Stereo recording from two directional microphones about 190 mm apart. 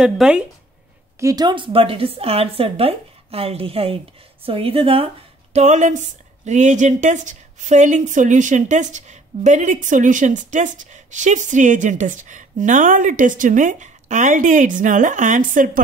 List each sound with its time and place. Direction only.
0.0 s speech: 5° right (ahead or behind)
1.2 s a woman's voice: 20° right (ahead or behind); by 15.8 s 45° right (ahead or behind)